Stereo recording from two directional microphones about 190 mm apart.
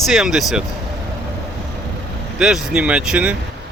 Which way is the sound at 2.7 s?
5° right (ahead or behind).